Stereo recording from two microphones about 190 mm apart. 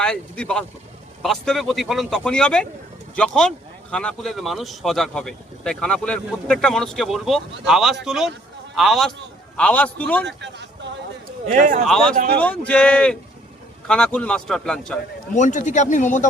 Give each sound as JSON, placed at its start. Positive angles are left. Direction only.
{"t": 0.0, "sound": "a man's voice", "side_deg": 5}
{"t": 10.2, "sound": "speech", "side_deg": -65}
{"t": 11.5, "sound": "speech", "side_deg": -40}
{"t": 11.9, "sound": "speech", "side_deg": 5}
{"t": 15.4, "sound": "speech", "side_deg": 40}